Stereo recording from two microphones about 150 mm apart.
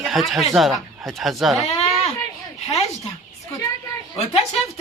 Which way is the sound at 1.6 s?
45° left (ahead or behind).